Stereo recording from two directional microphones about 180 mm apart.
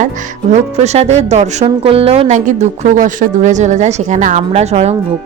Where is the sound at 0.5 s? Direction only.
40° right (ahead or behind).